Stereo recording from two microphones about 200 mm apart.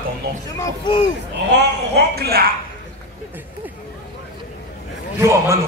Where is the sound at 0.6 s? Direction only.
25° left (ahead or behind).